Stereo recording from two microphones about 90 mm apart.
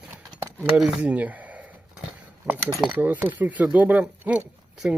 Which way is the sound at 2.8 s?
15° right (ahead or behind).